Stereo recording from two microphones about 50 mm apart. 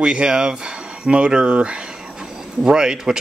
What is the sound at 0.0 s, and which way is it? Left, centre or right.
Speech, centre.